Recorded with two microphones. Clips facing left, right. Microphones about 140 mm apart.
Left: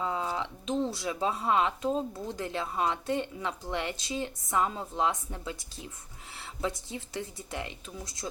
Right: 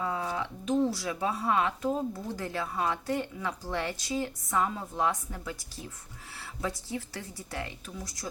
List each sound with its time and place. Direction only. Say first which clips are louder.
0.0 s a woman's voice: even; 25° left (ahead or behind)